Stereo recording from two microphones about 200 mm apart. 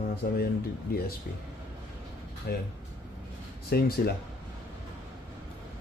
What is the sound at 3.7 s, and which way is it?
Speech, 55° left (ahead or behind).